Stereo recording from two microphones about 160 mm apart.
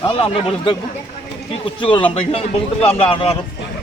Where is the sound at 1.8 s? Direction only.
30° left (ahead or behind).